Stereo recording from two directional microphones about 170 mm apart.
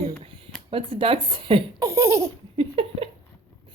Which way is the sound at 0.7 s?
30° right (ahead or behind).